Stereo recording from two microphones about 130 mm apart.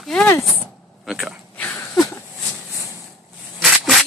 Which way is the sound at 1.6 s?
15° left (ahead or behind).